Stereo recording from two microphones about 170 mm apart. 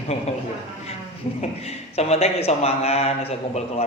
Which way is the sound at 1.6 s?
40° left (ahead or behind).